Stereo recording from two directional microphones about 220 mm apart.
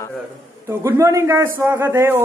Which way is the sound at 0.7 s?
10° right (ahead or behind).